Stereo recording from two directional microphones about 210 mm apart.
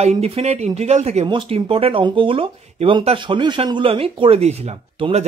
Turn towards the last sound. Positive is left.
turn(degrees=-30)  # may be behind; listen again after turning